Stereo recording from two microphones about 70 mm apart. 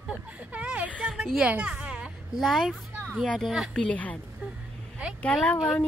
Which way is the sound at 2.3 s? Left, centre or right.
Centre.